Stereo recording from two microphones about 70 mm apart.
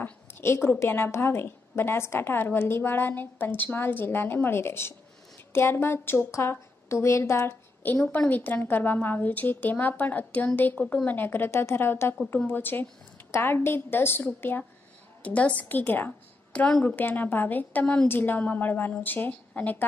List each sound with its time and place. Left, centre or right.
0.0 s a sound: left
0.7 s a woman's voice: left
8.3 s a woman's voice: left
15.2 s a woman's voice: left
16.5 s a woman's voice: centre
16.8 s a woman's voice: left